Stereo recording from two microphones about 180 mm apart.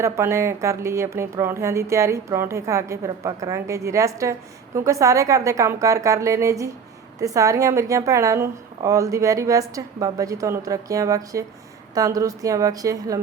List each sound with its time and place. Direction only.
0.0 s a woman's voice: 15° right (ahead or behind)